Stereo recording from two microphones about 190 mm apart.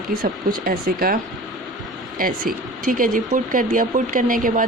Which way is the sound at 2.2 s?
45° right (ahead or behind).